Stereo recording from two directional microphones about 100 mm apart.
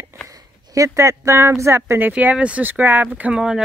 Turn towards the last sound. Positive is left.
turn(degrees=-10)  # may be behind; listen again after turning